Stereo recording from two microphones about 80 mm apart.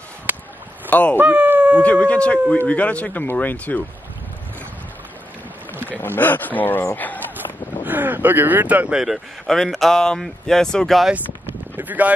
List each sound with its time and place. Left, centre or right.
0.3 s a sound: right
0.8 s speech: centre
1.1 s a sound: centre
1.8 s speech: centre
6.0 s speech: left
7.8 s speech: right
8.9 s speech: centre
11.7 s speech: right